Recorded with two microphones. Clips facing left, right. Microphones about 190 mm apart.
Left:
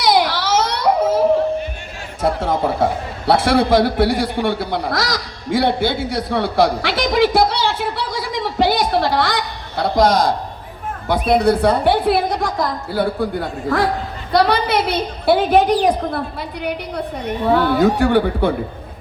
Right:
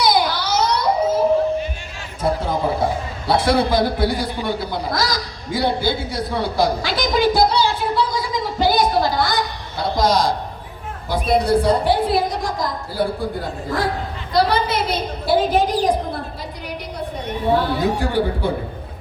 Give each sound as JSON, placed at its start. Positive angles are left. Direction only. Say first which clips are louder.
{"t": 0.0, "sound": "a sound", "louder": "left 2 dB", "side_deg": 75}
{"t": 2.2, "sound": "a man's voice", "louder": "left 2 dB", "side_deg": 75}
{"t": 17.5, "sound": "a man's voice", "louder": "left 4 dB", "side_deg": 65}